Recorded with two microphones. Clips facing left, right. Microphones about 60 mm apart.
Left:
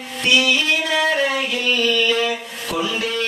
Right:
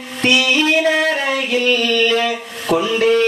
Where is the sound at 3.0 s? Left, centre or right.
Right.